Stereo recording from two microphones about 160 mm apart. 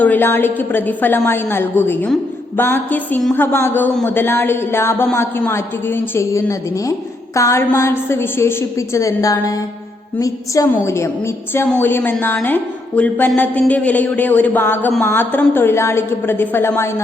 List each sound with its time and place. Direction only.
0.0 s a woman's voice: 10° left (ahead or behind)
10.2 s music: 20° left (ahead or behind)
10.8 s a woman's voice: 15° left (ahead or behind)